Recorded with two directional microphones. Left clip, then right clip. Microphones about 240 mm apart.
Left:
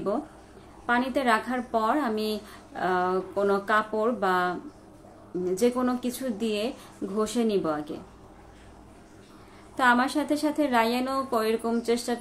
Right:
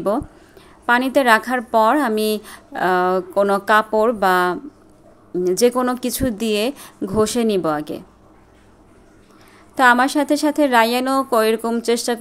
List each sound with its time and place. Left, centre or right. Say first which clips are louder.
0.8 s speech: right 10 dB; right
9.8 s a woman's voice: right 9 dB; right